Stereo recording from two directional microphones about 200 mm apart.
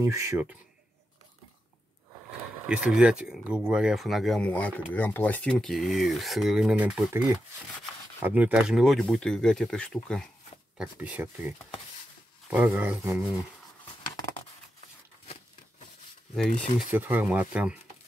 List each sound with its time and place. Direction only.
0.0 s speech: 15° right (ahead or behind)
2.6 s speech: 5° right (ahead or behind)
10.8 s speech: 10° right (ahead or behind)
16.3 s speech: 5° left (ahead or behind)
16.9 s speech: 10° right (ahead or behind)